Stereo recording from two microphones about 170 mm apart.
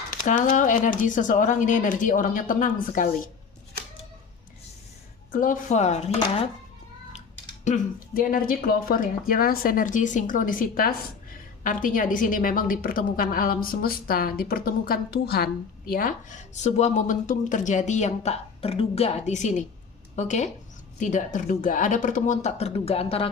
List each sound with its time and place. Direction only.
0.1 s speech: 50° left (ahead or behind)
5.3 s speech: 50° left (ahead or behind)
7.6 s a woman's voice: 50° left (ahead or behind); by 15.4 s 65° left (ahead or behind)
15.9 s speech: 55° left (ahead or behind); by 23.3 s 35° left (ahead or behind)